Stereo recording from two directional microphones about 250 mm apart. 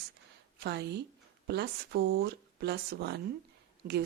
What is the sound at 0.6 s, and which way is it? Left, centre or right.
Speech, right.